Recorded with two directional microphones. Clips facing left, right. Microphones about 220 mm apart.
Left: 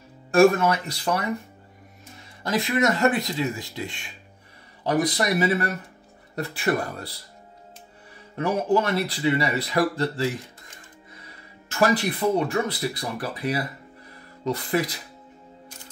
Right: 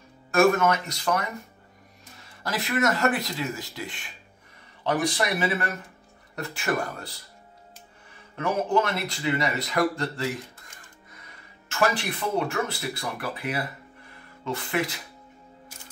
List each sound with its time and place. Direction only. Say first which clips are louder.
0.3 s speech: left 3 dB; 30° left (ahead or behind)
2.7 s speech: left 2 dB; 20° left (ahead or behind)
4.8 s speech: left 3 dB; 35° left (ahead or behind)
8.4 s speech: left 2 dB; 35° left (ahead or behind)
11.2 s music: left 3 dB; 35° left (ahead or behind)
12.0 s speech: left 5 dB; 35° left (ahead or behind)